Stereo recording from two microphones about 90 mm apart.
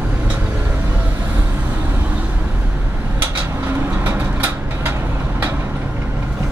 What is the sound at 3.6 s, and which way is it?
Vehicle, 25° right (ahead or behind).